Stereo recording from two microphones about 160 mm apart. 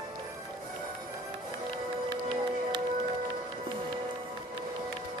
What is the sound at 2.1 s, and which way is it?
Music, 30° right (ahead or behind).